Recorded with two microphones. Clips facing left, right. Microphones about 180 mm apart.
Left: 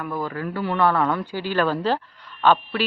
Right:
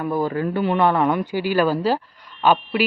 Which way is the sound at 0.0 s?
30° right (ahead or behind).